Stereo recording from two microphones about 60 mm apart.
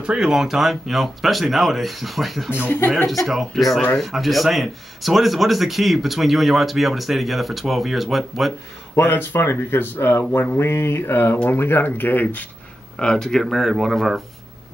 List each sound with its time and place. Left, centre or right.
0.0 s speech: centre
9.1 s speech: left
12.9 s speech: centre